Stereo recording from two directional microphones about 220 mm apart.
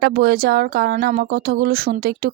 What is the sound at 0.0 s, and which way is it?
Speech, 45° right (ahead or behind).